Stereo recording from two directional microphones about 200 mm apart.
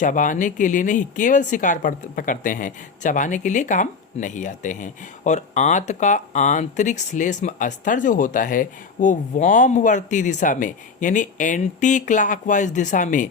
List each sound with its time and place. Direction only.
0.0 s speech: 40° left (ahead or behind)